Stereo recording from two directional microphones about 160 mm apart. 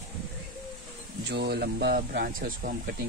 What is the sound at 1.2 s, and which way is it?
A man's voice, 90° right.